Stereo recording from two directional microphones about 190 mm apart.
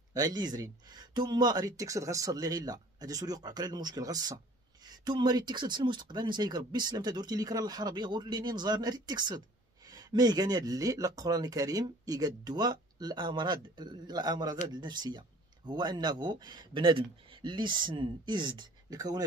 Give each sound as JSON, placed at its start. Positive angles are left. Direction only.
{"t": 0.1, "sound": "speech", "side_deg": -20}